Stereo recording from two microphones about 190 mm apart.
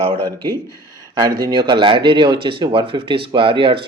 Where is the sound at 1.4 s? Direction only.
25° right (ahead or behind).